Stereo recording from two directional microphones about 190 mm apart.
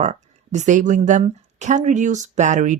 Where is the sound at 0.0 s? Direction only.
40° right (ahead or behind).